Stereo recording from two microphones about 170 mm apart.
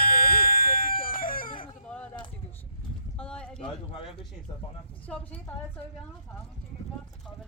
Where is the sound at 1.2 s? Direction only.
55° left (ahead or behind).